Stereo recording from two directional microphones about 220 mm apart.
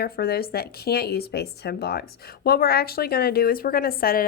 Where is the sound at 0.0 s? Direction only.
45° left (ahead or behind).